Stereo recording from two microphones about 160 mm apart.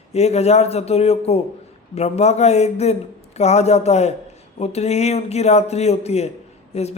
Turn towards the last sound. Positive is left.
turn(degrees=40)  # may be behind; listen again after turning